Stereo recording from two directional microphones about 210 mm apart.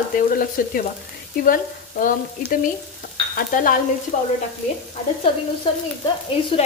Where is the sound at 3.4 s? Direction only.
40° left (ahead or behind).